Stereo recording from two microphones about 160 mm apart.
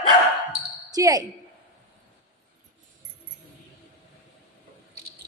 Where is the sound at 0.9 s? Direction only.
20° right (ahead or behind).